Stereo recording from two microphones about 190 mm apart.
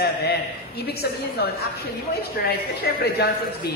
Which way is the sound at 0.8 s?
55° left (ahead or behind).